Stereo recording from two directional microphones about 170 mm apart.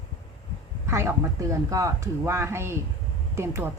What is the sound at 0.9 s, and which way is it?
A woman's voice, 15° right (ahead or behind).